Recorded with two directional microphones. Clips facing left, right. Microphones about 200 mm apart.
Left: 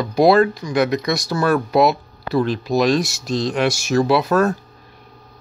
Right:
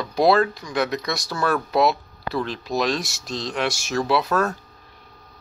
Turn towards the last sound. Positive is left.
turn(degrees=15)  # may be behind; listen again after turning